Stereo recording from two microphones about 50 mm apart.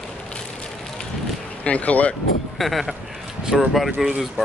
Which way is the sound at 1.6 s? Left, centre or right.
Left.